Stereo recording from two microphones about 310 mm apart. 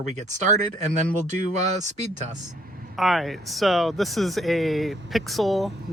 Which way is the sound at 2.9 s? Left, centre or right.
Centre.